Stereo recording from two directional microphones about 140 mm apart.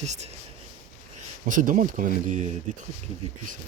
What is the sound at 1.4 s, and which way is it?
Speech, 70° right (ahead or behind).